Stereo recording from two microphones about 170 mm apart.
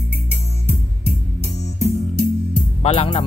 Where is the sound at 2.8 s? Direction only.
35° left (ahead or behind).